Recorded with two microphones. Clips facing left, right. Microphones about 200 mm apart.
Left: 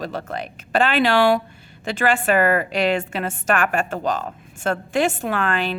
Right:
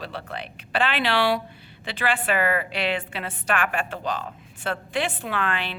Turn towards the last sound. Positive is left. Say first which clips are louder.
# left 5 dB
turn(degrees=45)  # may be behind; listen again after turning